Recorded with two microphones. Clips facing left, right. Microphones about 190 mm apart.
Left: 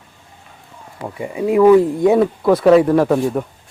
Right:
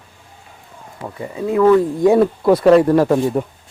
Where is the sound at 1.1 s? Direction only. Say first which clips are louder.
Left 3 dB; 15° left (ahead or behind).